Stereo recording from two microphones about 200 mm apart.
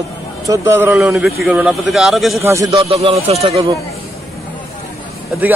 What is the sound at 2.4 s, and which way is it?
Speech, 15° right (ahead or behind).